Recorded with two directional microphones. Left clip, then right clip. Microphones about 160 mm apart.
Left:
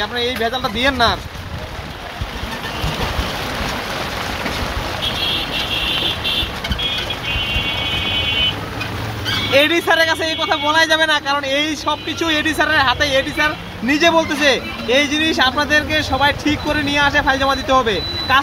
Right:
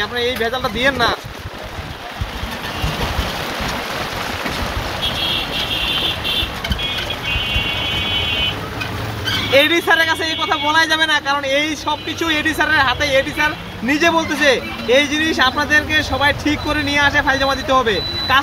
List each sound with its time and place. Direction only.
0.0 s speech: 15° left (ahead or behind)
9.5 s a man's voice: 10° left (ahead or behind)